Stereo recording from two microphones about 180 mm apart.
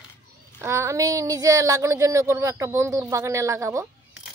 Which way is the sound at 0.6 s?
15° right (ahead or behind).